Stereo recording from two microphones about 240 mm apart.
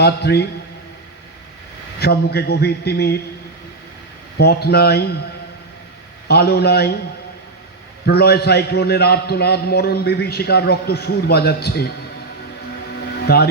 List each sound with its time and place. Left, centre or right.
0.0 s a man's voice: left
2.0 s a man's voice: left
4.4 s a man's voice: left
6.2 s a man's voice: left
8.0 s a man's voice: left
13.2 s speech: left